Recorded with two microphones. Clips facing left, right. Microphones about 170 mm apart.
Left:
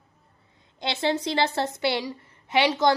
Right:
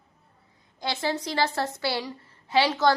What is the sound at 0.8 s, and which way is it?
A woman's voice, 25° left (ahead or behind).